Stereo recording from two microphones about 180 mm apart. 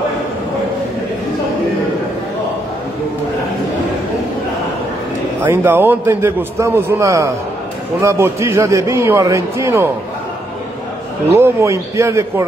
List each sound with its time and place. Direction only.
5.4 s a man's voice: 10° right (ahead or behind)
11.3 s a man's voice: 15° right (ahead or behind)